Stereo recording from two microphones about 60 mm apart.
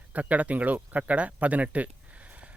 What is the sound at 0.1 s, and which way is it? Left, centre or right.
Speech, right.